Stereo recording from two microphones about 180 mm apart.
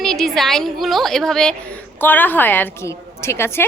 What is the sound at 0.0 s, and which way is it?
A woman's voice, centre (ahead or behind).